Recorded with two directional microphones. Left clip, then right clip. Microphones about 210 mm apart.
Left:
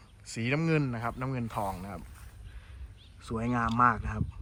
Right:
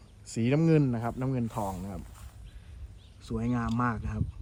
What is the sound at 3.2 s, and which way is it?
Speech, 5° right (ahead or behind).